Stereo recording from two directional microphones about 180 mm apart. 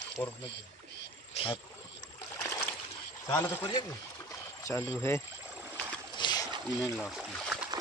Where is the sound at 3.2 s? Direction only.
15° left (ahead or behind).